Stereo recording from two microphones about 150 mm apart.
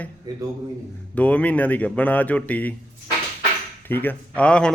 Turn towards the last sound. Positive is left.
turn(degrees=5)  # may be behind; listen again after turning